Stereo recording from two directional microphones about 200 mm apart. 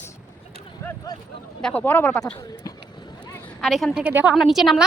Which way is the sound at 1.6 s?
5° left (ahead or behind).